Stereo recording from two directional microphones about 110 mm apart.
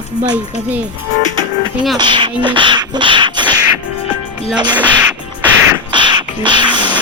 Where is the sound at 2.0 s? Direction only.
45° right (ahead or behind).